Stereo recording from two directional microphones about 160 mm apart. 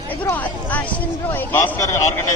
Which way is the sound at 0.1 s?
10° left (ahead or behind).